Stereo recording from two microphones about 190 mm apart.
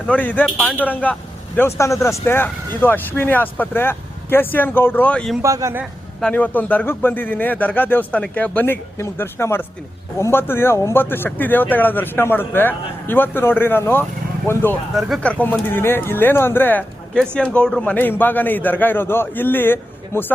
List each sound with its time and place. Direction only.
0.1 s speech: 10° left (ahead or behind)
5.4 s a man's voice: 15° right (ahead or behind)
6.1 s speech: 5° left (ahead or behind)